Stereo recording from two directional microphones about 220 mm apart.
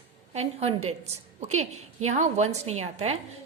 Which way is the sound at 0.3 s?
30° right (ahead or behind).